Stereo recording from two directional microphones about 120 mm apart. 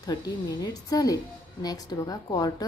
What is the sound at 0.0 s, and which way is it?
A woman's voice, 30° left (ahead or behind).